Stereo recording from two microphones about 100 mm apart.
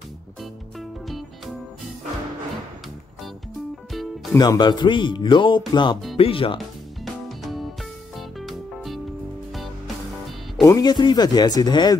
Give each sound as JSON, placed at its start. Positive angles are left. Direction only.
{"t": 0.4, "sound": "music", "side_deg": 0}
{"t": 4.4, "sound": "speech", "side_deg": 45}
{"t": 6.1, "sound": "speech", "side_deg": 65}
{"t": 7.2, "sound": "music", "side_deg": 0}
{"t": 10.6, "sound": "speech", "side_deg": 40}